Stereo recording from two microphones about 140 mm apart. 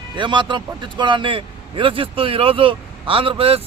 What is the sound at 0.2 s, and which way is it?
A man's voice, 35° right (ahead or behind).